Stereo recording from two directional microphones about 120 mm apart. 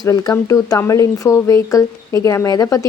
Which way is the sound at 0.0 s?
30° left (ahead or behind).